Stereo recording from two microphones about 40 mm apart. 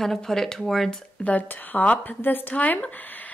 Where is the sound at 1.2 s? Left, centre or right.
Left.